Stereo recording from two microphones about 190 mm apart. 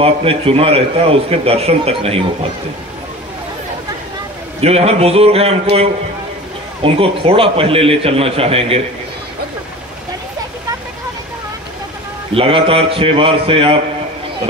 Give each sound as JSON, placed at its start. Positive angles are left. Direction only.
{"t": 0.0, "sound": "a man's voice", "side_deg": -30}
{"t": 4.6, "sound": "a man's voice", "side_deg": -35}
{"t": 12.4, "sound": "a man's voice", "side_deg": -30}